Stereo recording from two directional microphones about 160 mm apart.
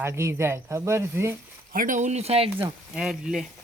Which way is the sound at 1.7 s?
55° right (ahead or behind).